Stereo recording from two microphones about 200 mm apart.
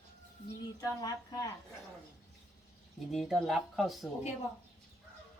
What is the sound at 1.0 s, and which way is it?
Speech, 15° left (ahead or behind).